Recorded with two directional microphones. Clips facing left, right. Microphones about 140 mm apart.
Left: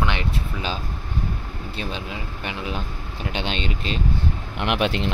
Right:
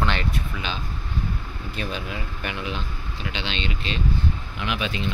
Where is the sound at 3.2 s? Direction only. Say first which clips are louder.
Left 3 dB; 50° left (ahead or behind).